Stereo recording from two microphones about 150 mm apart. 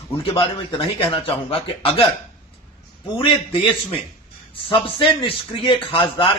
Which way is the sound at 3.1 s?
35° left (ahead or behind).